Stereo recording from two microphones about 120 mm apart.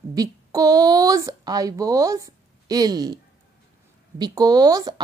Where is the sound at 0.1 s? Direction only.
30° right (ahead or behind).